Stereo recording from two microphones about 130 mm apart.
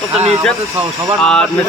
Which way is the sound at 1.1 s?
5° left (ahead or behind).